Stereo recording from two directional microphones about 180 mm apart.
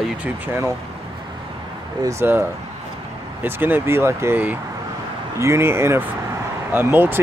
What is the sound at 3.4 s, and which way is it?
Speech, 10° right (ahead or behind).